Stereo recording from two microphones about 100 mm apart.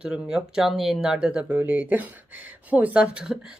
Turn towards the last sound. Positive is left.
turn(degrees=-10)  # may be behind; listen again after turning